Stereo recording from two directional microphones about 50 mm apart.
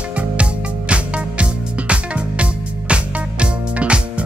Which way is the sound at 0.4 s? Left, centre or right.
Right.